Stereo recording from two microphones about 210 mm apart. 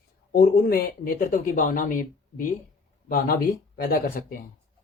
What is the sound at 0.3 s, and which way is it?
Speech, 45° left (ahead or behind).